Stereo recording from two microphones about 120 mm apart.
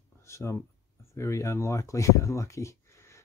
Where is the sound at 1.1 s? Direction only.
25° left (ahead or behind).